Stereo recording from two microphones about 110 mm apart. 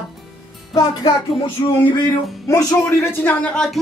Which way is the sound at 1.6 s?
30° left (ahead or behind).